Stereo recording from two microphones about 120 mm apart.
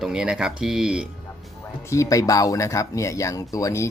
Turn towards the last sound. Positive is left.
turn(degrees=25)  # may be behind; listen again after turning